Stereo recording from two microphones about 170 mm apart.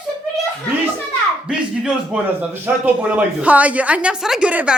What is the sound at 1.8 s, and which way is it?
A woman's voice, 10° right (ahead or behind).